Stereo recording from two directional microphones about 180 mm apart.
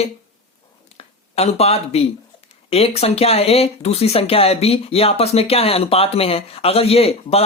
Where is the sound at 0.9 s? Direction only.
35° left (ahead or behind).